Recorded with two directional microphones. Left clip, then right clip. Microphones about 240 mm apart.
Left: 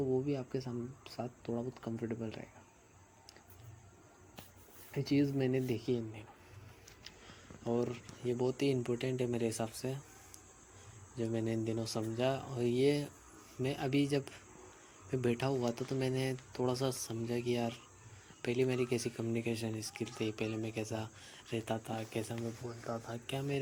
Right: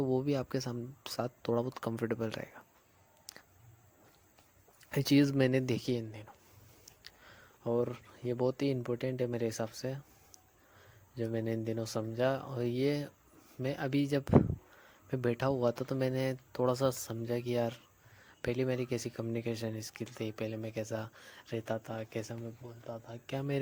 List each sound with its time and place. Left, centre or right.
0.1 s speech: right
4.9 s speech: right
11.1 s speech: right